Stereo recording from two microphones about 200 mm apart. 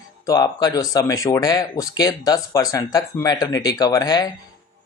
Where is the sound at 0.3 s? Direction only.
20° left (ahead or behind).